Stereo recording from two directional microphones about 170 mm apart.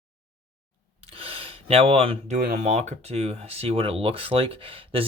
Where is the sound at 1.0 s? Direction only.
35° right (ahead or behind).